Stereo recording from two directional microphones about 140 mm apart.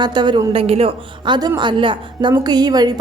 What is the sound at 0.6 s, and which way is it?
A woman's voice, 45° right (ahead or behind).